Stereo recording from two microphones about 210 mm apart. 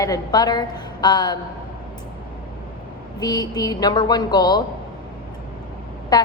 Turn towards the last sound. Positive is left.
turn(degrees=20)  # may be behind; listen again after turning